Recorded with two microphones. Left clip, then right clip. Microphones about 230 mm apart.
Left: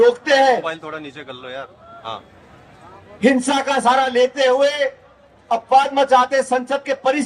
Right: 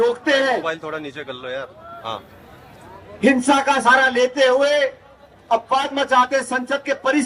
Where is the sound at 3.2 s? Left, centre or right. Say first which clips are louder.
Right 1 dB; left.